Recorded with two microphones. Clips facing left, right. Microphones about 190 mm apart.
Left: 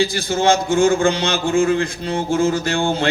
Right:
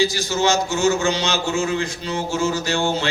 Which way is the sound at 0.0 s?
55° left (ahead or behind).